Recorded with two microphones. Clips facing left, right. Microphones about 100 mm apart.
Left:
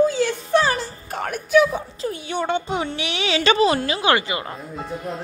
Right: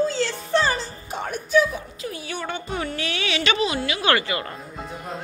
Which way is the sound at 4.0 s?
20° left (ahead or behind).